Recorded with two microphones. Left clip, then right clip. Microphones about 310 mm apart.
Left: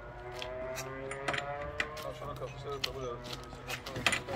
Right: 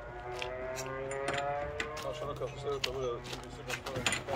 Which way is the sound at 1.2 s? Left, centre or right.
Centre.